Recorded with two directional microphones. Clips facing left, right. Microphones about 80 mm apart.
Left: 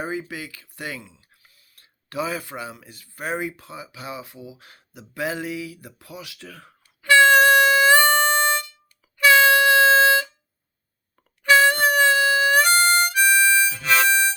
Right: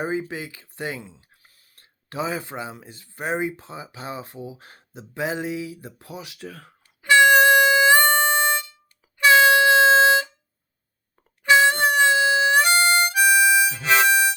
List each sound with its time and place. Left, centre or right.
0.0 s speech: right
6.8 s harmonica: centre
9.1 s music: right
11.4 s harmonica: right
13.1 s harmonica: centre